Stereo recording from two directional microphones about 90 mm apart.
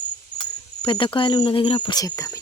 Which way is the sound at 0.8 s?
70° left (ahead or behind).